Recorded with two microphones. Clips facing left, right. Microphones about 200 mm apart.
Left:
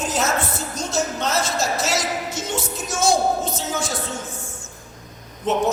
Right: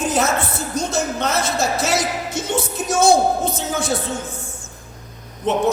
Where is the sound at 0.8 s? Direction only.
60° right (ahead or behind).